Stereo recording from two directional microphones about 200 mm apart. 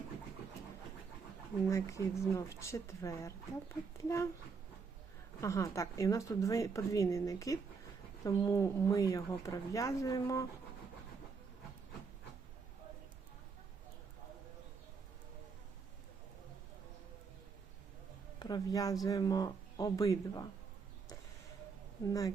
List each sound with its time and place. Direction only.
1.7 s speech: 15° left (ahead or behind)
5.4 s speech: 15° left (ahead or behind)
18.3 s speech: 20° left (ahead or behind)